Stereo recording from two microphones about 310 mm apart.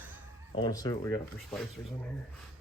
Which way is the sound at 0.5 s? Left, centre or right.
Centre.